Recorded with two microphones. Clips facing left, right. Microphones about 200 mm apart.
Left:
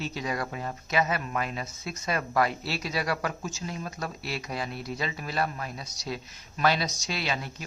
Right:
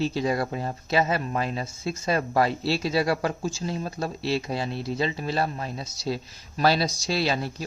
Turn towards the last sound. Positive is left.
turn(degrees=-35)  # may be behind; listen again after turning